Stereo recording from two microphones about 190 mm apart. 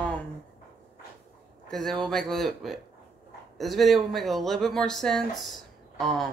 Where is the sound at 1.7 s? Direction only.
Centre (ahead or behind).